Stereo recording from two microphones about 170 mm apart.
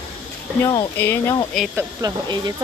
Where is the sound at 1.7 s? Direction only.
20° right (ahead or behind).